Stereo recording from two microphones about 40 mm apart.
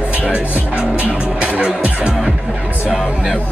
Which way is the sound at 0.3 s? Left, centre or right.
Right.